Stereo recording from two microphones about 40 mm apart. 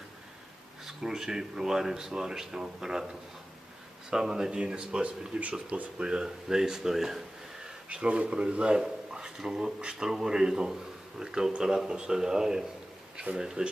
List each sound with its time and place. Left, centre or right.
0.9 s speech: centre
4.1 s speech: centre
7.9 s speech: right
8.7 s speech: centre